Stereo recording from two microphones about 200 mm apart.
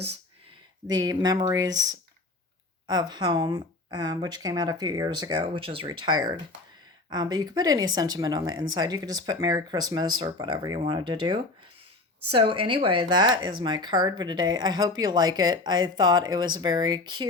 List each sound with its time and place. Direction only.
0.9 s speech: 20° right (ahead or behind)